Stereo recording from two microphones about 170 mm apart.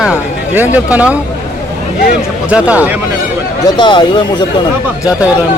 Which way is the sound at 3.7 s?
25° left (ahead or behind).